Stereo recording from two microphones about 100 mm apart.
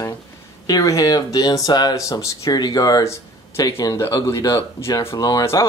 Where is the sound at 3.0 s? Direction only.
30° left (ahead or behind).